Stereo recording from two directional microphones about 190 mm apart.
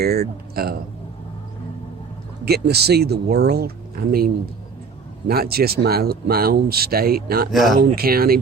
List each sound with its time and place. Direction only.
0.0 s speech: 55° right (ahead or behind)
2.4 s speech: 55° right (ahead or behind)
5.3 s speech: 55° right (ahead or behind)
7.5 s speech: centre (ahead or behind)
7.8 s speech: 45° right (ahead or behind)